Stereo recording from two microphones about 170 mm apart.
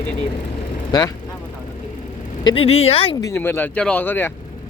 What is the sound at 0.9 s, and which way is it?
Speech, 25° left (ahead or behind).